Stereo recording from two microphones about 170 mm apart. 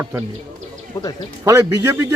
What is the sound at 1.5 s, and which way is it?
Speech, 15° right (ahead or behind).